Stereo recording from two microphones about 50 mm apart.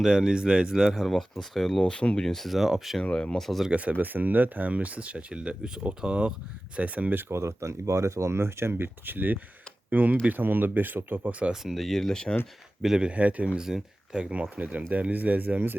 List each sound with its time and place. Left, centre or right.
0.0 s speech: centre
1.8 s speech: left
2.2 s speech: centre
2.6 s speech: centre
3.0 s speech: centre
3.4 s speech: centre
3.7 s speech: right
7.2 s speech: right
11.3 s speech: right
11.5 s speech: centre
13.0 s speech: right
13.6 s speech: centre
14.4 s speech: right